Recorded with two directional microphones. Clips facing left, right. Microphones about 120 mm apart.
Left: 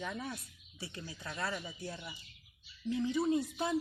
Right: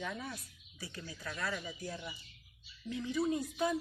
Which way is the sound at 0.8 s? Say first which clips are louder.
Left 1 dB; 25° left (ahead or behind).